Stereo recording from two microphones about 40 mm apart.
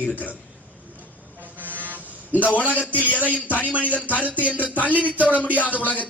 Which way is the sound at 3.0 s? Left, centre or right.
Left.